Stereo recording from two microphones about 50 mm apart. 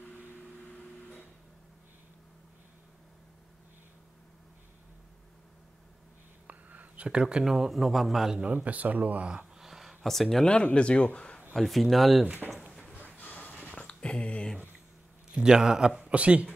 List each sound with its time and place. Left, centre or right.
6.4 s whispering: right
7.1 s a man's voice: centre
8.5 s speech: right
9.6 s a sound: centre
10.0 s a man's voice: centre
10.4 s speech: left
11.1 s a sound: left
11.5 s a man's voice: centre
13.2 s a sound: left
13.7 s a sound: left
15.3 s a man's voice: centre
16.0 s speech: right